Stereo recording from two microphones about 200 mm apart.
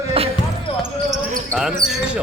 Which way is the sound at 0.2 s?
30° right (ahead or behind).